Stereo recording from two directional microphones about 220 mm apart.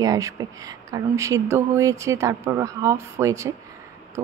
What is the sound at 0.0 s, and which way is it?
A woman's voice, 15° right (ahead or behind).